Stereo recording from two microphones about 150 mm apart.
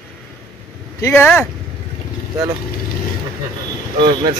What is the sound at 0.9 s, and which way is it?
Speech, 15° left (ahead or behind).